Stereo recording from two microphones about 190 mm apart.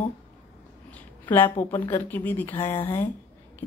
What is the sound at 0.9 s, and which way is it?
A woman's voice, 10° left (ahead or behind).